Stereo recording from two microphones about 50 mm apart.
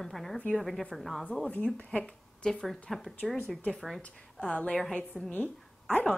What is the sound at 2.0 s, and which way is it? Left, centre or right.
Speech, centre.